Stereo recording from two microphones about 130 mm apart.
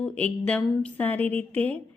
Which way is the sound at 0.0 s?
10° left (ahead or behind).